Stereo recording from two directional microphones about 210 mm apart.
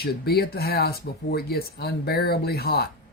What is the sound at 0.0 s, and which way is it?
Speech, 45° left (ahead or behind).